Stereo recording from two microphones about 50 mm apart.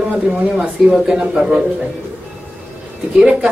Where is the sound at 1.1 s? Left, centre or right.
Right.